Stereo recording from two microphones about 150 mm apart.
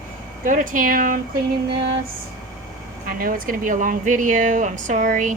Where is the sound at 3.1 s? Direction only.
75° right (ahead or behind).